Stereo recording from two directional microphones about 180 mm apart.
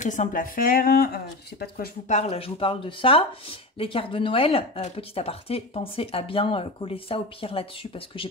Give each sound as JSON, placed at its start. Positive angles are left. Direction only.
{"t": 0.0, "sound": "speech", "side_deg": 45}
{"t": 2.0, "sound": "speech", "side_deg": 40}